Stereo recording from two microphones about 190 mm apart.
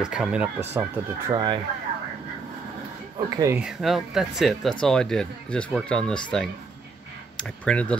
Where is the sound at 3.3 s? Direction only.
15° right (ahead or behind).